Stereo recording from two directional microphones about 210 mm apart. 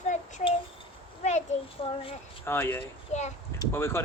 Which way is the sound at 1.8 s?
25° left (ahead or behind).